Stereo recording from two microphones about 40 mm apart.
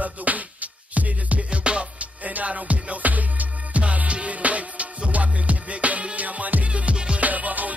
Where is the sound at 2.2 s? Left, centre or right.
Right.